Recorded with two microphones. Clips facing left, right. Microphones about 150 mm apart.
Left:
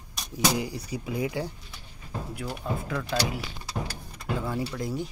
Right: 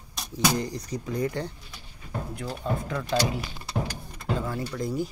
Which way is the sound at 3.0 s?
5° right (ahead or behind).